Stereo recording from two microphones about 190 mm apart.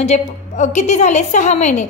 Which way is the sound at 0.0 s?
35° left (ahead or behind).